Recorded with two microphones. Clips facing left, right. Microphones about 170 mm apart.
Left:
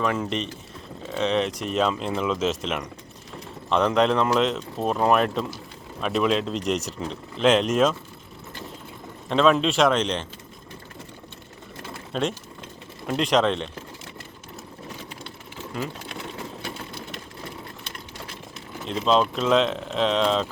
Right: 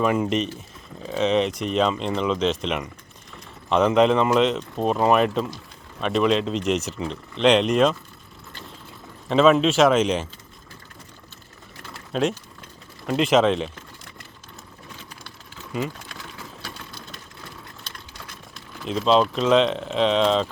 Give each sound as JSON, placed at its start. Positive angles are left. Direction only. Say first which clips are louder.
{"t": 0.0, "sound": "speech", "louder": "right 4 dB", "side_deg": -10}
{"t": 9.3, "sound": "speech", "louder": "right 3 dB", "side_deg": 0}
{"t": 12.1, "sound": "speech", "louder": "right 3 dB", "side_deg": 0}
{"t": 15.9, "sound": "sewing machine", "louder": "left 4 dB", "side_deg": 25}
{"t": 18.9, "sound": "speech", "louder": "right 2 dB", "side_deg": 0}